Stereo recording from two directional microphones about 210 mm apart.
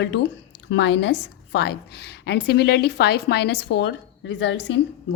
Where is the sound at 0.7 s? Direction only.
55° left (ahead or behind).